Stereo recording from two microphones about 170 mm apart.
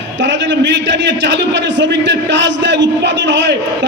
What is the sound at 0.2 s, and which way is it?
A man's voice, 90° right.